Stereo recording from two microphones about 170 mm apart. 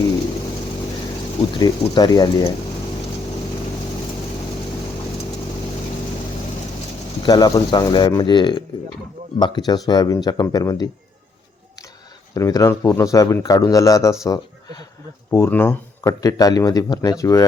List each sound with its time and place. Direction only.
1.5 s a man's voice: 25° left (ahead or behind)
7.2 s a man's voice: 25° left (ahead or behind)
12.3 s a man's voice: 20° left (ahead or behind)